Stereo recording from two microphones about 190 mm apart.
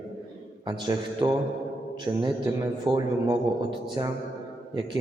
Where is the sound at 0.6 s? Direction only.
25° right (ahead or behind).